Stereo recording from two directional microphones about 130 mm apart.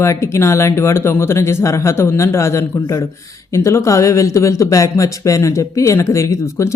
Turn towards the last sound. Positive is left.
turn(degrees=20)  # may be behind; listen again after turning